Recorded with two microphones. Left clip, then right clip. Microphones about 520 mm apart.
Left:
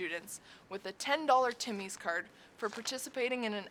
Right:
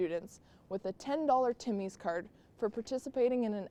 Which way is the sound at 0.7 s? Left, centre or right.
Right.